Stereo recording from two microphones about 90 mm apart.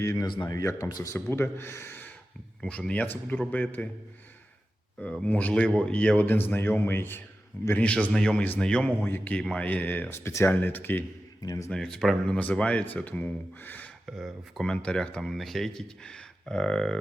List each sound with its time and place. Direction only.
0.0 s speech: 35° left (ahead or behind)
0.3 s speech: 50° left (ahead or behind); by 3.8 s 20° left (ahead or behind)
5.2 s speech: 15° left (ahead or behind)
7.8 s speech: 15° left (ahead or behind)
9.0 s speech: 25° left (ahead or behind)
9.4 s speech: 10° left (ahead or behind)
10.2 s speech: 30° left (ahead or behind)
11.4 s speech: 35° left (ahead or behind)
11.7 s speech: 5° left (ahead or behind)
12.3 s speech: 15° left (ahead or behind)
14.2 s speech: centre (ahead or behind)